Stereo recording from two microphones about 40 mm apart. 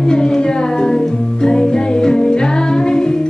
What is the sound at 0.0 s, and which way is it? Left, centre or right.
Music, centre.